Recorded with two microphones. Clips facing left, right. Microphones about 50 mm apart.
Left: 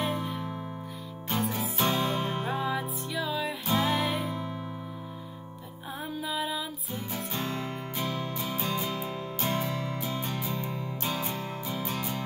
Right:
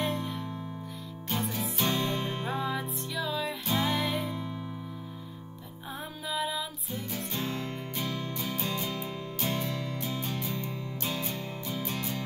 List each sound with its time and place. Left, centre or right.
0.0 s music: centre
4.3 s music: left
6.3 s music: centre